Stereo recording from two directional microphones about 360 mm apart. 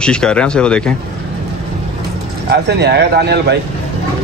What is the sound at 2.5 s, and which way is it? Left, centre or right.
Speech, right.